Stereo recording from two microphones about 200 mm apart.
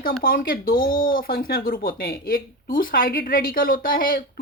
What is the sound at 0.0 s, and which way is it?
Speech, 45° left (ahead or behind).